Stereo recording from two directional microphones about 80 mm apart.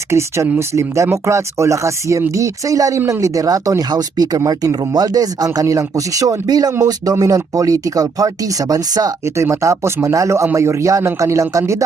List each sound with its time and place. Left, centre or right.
0.1 s speech: right
9.2 s speech: right